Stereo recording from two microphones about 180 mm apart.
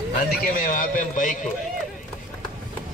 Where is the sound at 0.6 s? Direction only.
45° left (ahead or behind).